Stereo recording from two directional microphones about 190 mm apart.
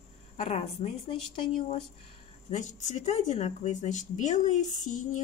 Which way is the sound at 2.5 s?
40° left (ahead or behind).